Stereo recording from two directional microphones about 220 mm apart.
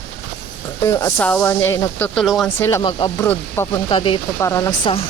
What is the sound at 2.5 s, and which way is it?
Speech, 10° left (ahead or behind).